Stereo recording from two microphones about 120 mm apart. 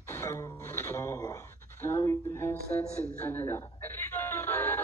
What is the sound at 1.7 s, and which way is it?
Speech, 20° left (ahead or behind).